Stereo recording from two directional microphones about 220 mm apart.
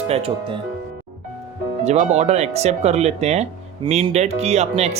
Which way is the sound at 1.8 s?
30° right (ahead or behind).